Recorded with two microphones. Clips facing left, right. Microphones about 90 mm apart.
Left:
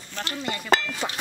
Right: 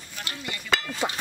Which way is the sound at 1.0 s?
15° right (ahead or behind).